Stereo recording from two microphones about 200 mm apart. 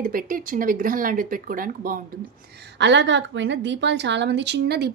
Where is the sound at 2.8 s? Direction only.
60° right (ahead or behind).